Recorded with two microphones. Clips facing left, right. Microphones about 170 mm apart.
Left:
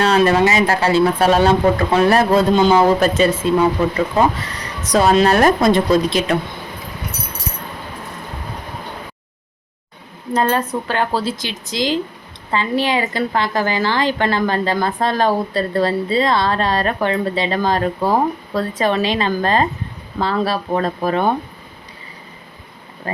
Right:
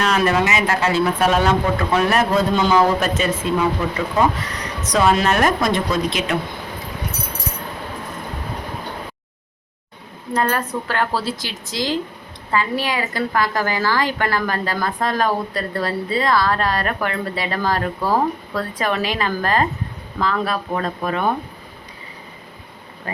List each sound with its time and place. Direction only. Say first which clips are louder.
0.0 s speech: left 4 dB; 30° left (ahead or behind)
4.8 s speech: left 4 dB; 35° left (ahead or behind)
10.3 s a woman's voice: left 3 dB; 20° left (ahead or behind)